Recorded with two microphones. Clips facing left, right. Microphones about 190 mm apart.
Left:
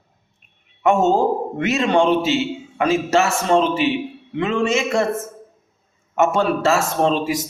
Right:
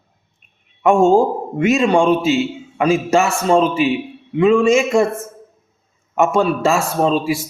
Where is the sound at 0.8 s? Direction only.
15° right (ahead or behind).